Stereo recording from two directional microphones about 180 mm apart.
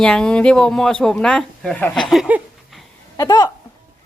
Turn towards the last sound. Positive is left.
turn(degrees=15)  # may be behind; listen again after turning